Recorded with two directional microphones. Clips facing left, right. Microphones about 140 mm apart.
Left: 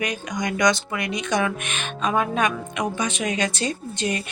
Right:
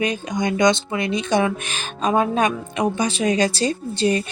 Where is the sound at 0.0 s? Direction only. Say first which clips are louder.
Right 4 dB; 25° right (ahead or behind).